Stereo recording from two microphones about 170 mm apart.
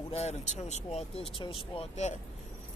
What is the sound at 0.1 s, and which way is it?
Speech, 40° left (ahead or behind).